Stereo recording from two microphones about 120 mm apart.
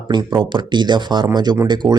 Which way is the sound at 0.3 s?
40° right (ahead or behind).